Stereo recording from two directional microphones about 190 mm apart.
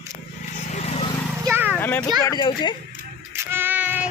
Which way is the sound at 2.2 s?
20° left (ahead or behind).